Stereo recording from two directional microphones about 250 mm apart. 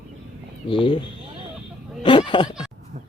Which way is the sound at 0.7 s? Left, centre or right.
Centre.